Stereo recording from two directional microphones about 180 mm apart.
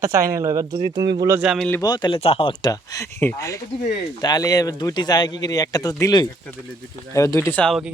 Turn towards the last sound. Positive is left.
turn(degrees=5)  # may be behind; listen again after turning